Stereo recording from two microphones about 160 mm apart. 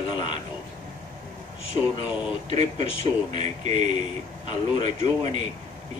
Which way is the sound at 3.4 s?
30° left (ahead or behind).